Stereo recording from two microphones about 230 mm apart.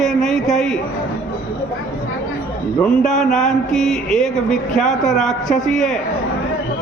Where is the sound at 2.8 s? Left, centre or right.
Centre.